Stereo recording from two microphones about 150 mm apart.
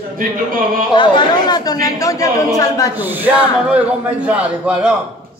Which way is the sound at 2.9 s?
10° right (ahead or behind).